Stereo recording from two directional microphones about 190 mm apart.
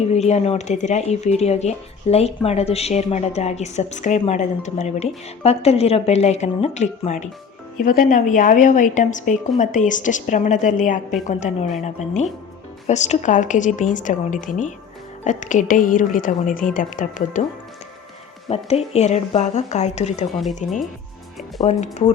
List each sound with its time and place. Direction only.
0.1 s a woman's voice: 35° left (ahead or behind)
18.5 s speech: 35° left (ahead or behind)
21.7 s speech: 35° left (ahead or behind)